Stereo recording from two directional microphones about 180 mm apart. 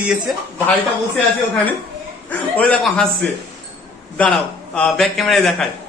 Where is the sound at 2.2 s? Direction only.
10° left (ahead or behind).